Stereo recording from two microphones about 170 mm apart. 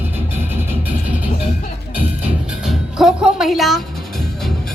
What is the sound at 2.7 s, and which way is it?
Speech, centre (ahead or behind).